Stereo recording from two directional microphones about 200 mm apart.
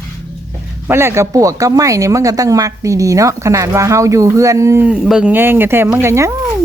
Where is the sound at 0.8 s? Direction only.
10° right (ahead or behind).